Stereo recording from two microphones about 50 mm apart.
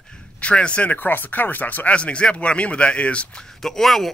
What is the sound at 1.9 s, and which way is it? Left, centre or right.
Speech, left.